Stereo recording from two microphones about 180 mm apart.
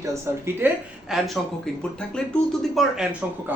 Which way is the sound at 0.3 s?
15° right (ahead or behind).